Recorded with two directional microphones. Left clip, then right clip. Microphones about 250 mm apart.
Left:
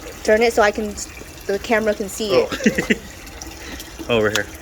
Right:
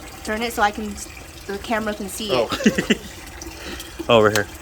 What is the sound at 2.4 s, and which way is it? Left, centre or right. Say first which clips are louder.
Speech: left 1 dB; right.